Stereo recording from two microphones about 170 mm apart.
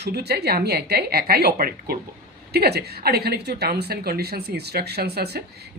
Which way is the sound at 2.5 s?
70° right (ahead or behind).